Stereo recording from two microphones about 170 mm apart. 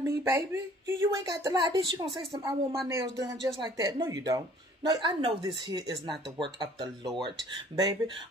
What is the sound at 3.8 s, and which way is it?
Speech, 20° right (ahead or behind).